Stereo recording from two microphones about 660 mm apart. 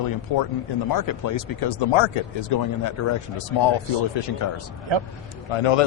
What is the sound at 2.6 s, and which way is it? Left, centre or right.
Speech, left.